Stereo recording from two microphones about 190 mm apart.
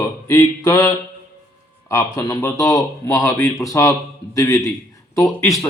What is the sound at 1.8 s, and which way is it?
A man's voice, 15° left (ahead or behind).